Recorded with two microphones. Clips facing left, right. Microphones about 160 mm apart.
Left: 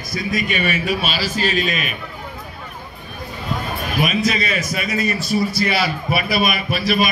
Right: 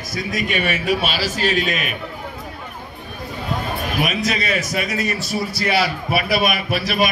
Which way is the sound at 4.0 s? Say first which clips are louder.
Left 3 dB; 70° right (ahead or behind).